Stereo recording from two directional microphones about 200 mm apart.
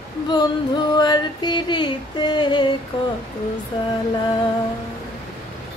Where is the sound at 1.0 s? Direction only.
20° left (ahead or behind).